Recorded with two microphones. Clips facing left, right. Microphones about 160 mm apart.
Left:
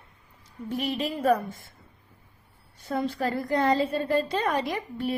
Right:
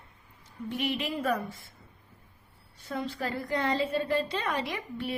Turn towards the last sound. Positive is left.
turn(degrees=40)  # may be behind; listen again after turning